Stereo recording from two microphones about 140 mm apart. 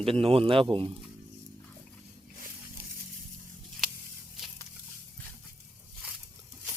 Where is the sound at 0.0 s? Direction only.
40° right (ahead or behind).